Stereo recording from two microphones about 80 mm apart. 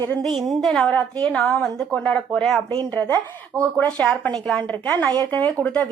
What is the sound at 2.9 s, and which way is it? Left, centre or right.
Speech, left.